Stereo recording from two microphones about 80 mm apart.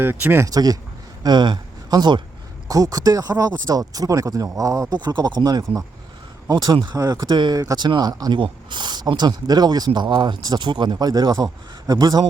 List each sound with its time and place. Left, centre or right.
0.0 s speech: right
0.4 s speech: right
1.2 s speech: right
2.6 s speech: right
4.9 s a man's voice: right
7.5 s speech: right
7.8 s speech: right
11.0 s a man's voice: right